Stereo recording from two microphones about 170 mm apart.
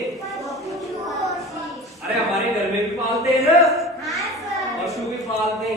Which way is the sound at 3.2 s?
20° right (ahead or behind).